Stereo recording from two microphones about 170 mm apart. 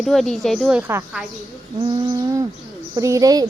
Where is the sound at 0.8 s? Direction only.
15° right (ahead or behind).